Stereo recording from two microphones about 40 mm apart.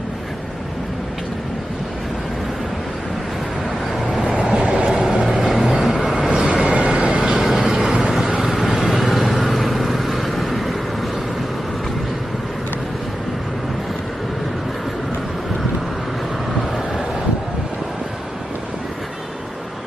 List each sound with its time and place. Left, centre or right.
4.1 s vehicle: centre
6.2 s vehicle: right; by 10.8 s centre